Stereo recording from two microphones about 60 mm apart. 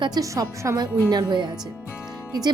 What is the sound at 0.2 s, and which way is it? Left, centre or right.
Speech, right.